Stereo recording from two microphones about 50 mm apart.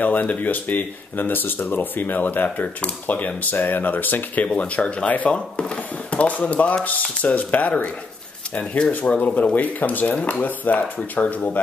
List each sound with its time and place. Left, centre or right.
0.0 s speech: left
4.5 s speech: left
8.7 s speech: centre
9.3 s speech: left
10.1 s speech: left
10.4 s speech: left